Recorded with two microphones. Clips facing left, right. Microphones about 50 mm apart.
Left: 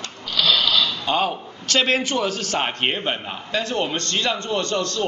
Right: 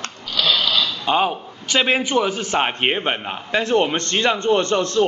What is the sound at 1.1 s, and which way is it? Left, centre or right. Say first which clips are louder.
A man's voice: right 5 dB; centre.